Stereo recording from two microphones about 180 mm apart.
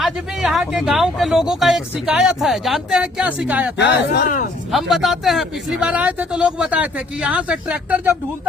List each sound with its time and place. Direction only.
0.0 s speech: centre (ahead or behind)
3.8 s speech: 70° left (ahead or behind)
4.7 s speech: centre (ahead or behind)